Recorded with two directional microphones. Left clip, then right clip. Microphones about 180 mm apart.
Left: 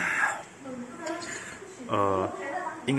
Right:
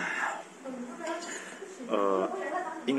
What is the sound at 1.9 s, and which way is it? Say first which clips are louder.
Speech: left 2 dB; centre (ahead or behind).